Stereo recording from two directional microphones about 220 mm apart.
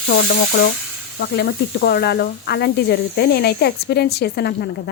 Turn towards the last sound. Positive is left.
turn(degrees=50)  # may be behind; listen again after turning